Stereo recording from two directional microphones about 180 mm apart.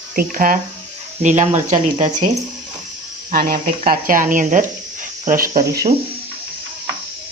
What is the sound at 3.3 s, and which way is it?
Speech, 55° right (ahead or behind).